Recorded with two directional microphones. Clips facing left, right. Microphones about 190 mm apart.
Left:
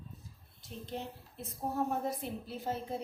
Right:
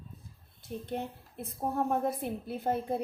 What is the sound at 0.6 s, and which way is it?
A woman's voice, 55° right (ahead or behind).